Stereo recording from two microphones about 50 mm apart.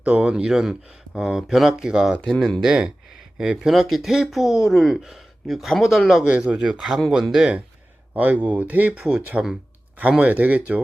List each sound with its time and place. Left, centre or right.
0.0 s speech: right; by 2.1 s centre
2.4 s speech: centre
2.6 s speech: centre
6.2 s speech: right
6.6 s speech: centre
8.1 s speech: right
9.3 s speech: centre
10.1 s speech: right